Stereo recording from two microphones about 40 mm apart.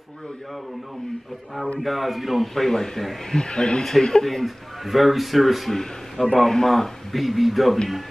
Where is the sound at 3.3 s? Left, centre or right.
Centre.